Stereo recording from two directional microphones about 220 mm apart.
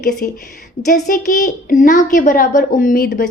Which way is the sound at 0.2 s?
40° left (ahead or behind).